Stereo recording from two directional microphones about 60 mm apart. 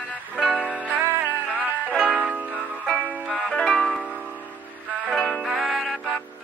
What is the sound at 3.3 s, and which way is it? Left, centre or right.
Music, centre.